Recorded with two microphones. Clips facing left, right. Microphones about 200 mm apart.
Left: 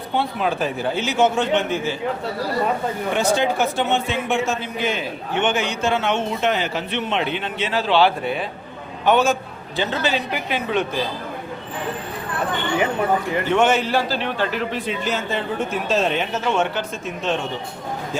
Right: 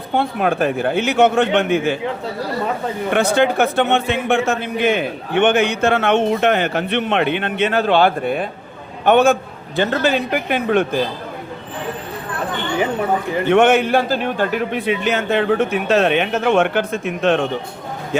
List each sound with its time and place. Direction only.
0.1 s a man's voice: 50° right (ahead or behind)
3.1 s a man's voice: 60° right (ahead or behind)
13.5 s a man's voice: 60° right (ahead or behind)